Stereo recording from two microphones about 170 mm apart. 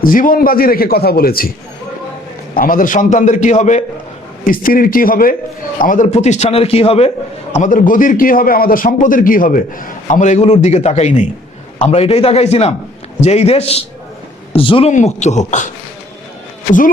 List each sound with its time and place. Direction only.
0.0 s a man's voice: 55° left (ahead or behind)
2.6 s a man's voice: 55° left (ahead or behind)
4.4 s a man's voice: 55° left (ahead or behind); by 7.1 s 35° left (ahead or behind)
7.5 s a man's voice: 45° left (ahead or behind)
14.9 s a man's voice: 40° left (ahead or behind)